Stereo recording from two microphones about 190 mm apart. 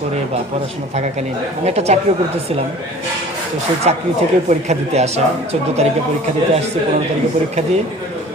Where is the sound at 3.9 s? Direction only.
35° right (ahead or behind).